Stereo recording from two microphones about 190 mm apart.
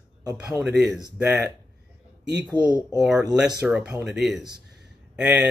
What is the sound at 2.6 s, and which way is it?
Speech, 20° right (ahead or behind).